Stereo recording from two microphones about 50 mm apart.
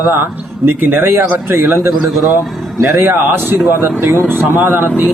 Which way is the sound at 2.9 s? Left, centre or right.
Right.